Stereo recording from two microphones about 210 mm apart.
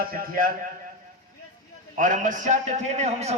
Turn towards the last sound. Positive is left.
turn(degrees=-30)  # may be behind; listen again after turning